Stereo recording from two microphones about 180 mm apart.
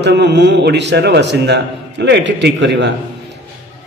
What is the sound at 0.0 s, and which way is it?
A man's voice, 70° right (ahead or behind).